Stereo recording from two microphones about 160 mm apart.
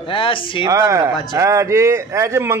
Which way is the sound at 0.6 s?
20° right (ahead or behind).